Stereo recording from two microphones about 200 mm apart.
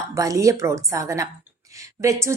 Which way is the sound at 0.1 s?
15° right (ahead or behind).